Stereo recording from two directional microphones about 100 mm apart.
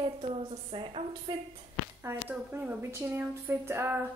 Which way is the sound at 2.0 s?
20° right (ahead or behind).